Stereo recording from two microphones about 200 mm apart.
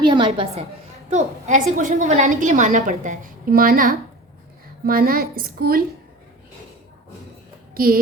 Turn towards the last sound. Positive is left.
turn(degrees=-45)  # may be behind; listen again after turning